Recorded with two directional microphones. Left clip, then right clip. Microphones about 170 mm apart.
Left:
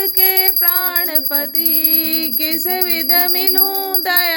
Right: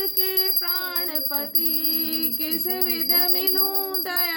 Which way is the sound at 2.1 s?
25° left (ahead or behind).